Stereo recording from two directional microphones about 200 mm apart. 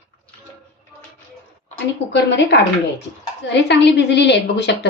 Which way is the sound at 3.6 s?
60° left (ahead or behind).